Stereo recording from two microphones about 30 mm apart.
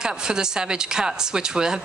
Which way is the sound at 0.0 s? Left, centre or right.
Right.